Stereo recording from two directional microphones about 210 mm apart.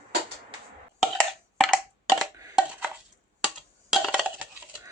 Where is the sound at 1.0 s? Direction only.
Centre (ahead or behind).